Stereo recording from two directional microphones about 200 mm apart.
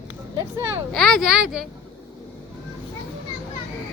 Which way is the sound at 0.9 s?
Centre (ahead or behind).